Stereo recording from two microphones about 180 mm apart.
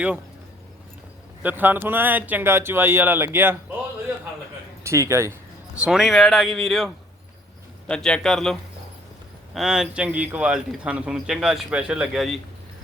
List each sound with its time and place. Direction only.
1.4 s speech: 10° right (ahead or behind)
4.8 s speech: 15° right (ahead or behind)
5.7 s a man's voice: 5° right (ahead or behind)
9.6 s a man's voice: centre (ahead or behind)